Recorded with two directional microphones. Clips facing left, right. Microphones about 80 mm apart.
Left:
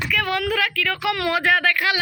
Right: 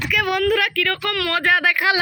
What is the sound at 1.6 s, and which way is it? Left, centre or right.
Speech, centre.